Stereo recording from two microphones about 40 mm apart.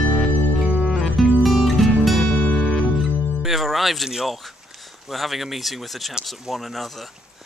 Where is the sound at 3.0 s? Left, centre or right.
Centre.